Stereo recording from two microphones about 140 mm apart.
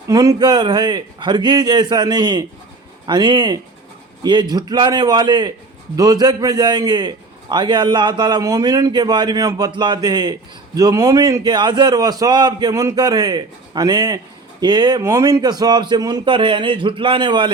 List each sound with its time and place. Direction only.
0.1 s a man's voice: 25° right (ahead or behind)